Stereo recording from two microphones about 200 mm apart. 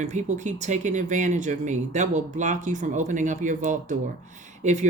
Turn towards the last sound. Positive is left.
turn(degrees=-35)  # may be behind; listen again after turning